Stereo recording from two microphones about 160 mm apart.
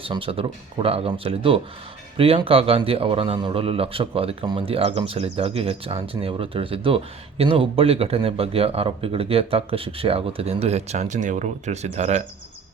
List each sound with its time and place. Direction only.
0.0 s a man's voice: 35° right (ahead or behind)